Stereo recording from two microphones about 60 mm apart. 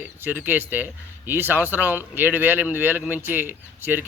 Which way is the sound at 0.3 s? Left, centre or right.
Right.